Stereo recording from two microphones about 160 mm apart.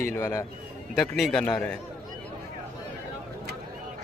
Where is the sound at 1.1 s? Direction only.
Centre (ahead or behind).